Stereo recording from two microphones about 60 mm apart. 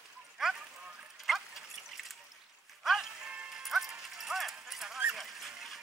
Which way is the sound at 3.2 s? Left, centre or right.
Centre.